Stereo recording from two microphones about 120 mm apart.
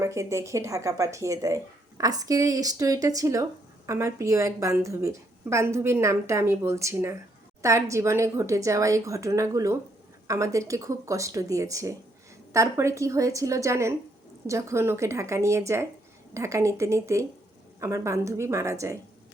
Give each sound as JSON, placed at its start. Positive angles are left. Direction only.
{"t": 0.0, "sound": "a woman's voice", "side_deg": -25}